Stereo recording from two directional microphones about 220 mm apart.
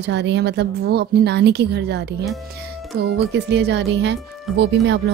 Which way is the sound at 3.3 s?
50° right (ahead or behind).